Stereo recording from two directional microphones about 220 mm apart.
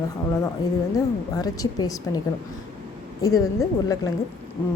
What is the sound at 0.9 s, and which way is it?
Speech, 15° left (ahead or behind).